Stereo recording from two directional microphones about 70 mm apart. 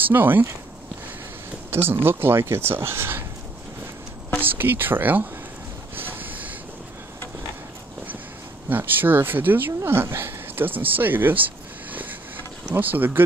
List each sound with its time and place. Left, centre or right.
0.0 s speech: right
1.7 s speech: right
4.4 s speech: right
5.9 s a sound: right
8.6 s speech: right